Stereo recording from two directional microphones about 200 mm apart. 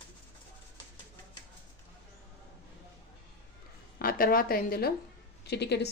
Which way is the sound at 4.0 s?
45° left (ahead or behind).